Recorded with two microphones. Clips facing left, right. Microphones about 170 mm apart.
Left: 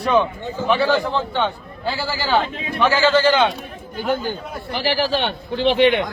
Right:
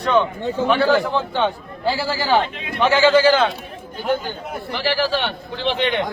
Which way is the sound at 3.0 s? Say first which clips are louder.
Right 2 dB; 10° right (ahead or behind).